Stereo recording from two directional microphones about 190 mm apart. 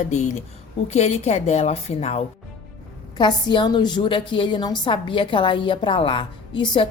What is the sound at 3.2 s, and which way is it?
A woman's voice, 25° left (ahead or behind).